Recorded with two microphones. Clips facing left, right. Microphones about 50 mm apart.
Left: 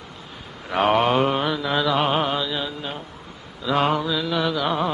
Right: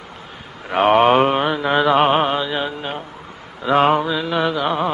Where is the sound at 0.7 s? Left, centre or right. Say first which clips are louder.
Right 5 dB; right.